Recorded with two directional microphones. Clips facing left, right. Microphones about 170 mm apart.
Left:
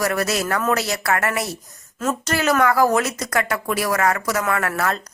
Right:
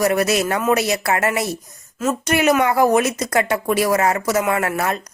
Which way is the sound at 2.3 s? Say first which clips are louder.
Right 2 dB; 20° right (ahead or behind).